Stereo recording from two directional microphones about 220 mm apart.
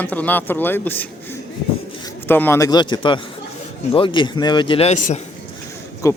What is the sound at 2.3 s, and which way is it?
A man's voice, 10° left (ahead or behind).